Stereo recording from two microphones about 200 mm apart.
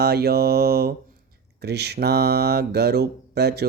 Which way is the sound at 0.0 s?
50° right (ahead or behind).